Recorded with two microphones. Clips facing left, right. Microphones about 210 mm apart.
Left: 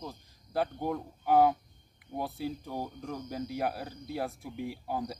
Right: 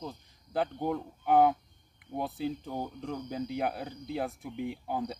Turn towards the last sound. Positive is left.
turn(degrees=0)  # may be behind; listen again after turning